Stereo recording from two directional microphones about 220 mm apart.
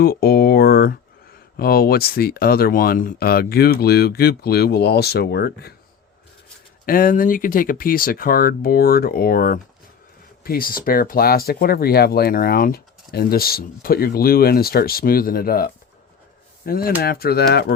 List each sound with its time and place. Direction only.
0.0 s speech: 45° left (ahead or behind)
6.8 s speech: 40° left (ahead or behind)